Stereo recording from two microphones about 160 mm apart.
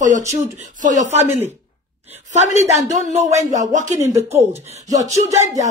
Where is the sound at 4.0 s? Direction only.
15° right (ahead or behind).